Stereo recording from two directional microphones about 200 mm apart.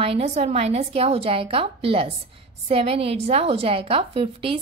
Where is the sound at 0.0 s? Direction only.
30° right (ahead or behind).